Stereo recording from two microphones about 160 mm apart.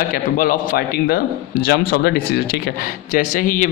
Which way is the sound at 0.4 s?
65° left (ahead or behind).